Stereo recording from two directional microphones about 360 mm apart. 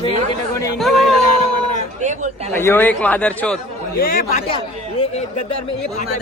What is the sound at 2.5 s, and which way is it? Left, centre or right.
A man's voice, centre.